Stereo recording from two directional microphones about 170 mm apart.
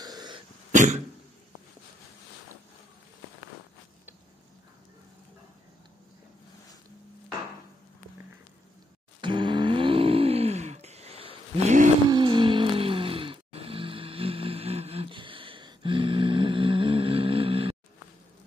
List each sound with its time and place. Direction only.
0.0 s dog: 25° right (ahead or behind)
0.7 s cough: 45° right (ahead or behind)
9.2 s groan: 30° right (ahead or behind); by 11.9 s 45° right (ahead or behind)
12.1 s a sound: 25° right (ahead or behind)